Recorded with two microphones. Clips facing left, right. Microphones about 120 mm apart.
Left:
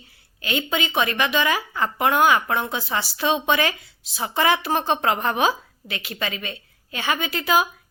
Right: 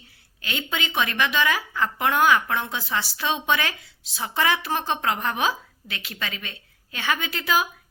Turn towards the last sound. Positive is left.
turn(degrees=15)  # may be behind; listen again after turning